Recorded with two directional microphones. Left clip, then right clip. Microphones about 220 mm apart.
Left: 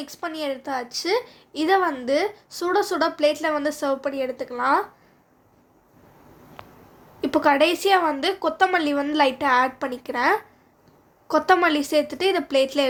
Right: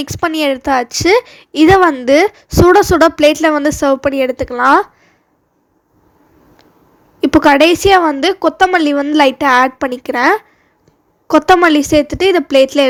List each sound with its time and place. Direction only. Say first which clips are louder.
0.0 s speech: right 14 dB; 40° right (ahead or behind)
7.2 s speech: right 10 dB; 35° right (ahead or behind)